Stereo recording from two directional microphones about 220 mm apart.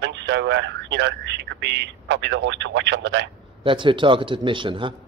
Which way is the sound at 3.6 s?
25° right (ahead or behind).